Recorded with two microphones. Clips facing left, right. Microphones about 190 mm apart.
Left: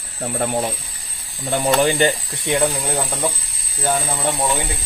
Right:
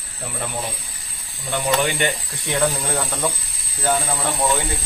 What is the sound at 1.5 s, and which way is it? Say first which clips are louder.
Speech: left 4 dB; 35° left (ahead or behind).